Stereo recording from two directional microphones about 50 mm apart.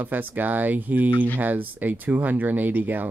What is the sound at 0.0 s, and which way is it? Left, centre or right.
Speech, right.